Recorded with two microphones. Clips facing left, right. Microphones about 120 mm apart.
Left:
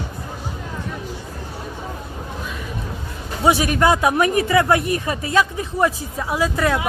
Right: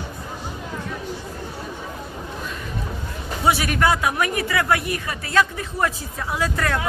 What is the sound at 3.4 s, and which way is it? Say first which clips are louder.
Speech: left 3 dB; 20° left (ahead or behind).